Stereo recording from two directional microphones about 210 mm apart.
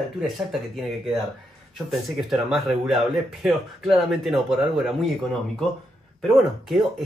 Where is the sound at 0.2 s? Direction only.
Centre (ahead or behind).